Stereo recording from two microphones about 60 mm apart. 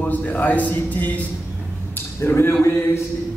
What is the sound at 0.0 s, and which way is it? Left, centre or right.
A man's voice, left.